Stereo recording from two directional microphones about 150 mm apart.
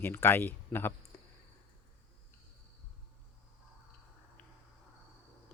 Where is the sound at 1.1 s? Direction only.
20° left (ahead or behind).